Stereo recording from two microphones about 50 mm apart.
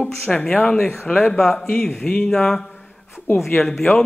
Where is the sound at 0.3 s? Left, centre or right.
Centre.